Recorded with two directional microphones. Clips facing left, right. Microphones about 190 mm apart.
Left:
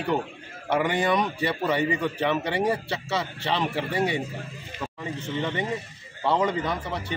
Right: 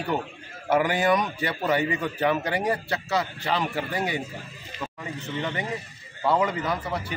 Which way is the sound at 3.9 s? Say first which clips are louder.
Left 3 dB; 25° left (ahead or behind).